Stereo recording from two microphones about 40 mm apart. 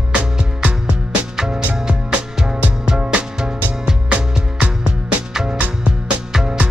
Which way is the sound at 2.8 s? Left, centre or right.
Right.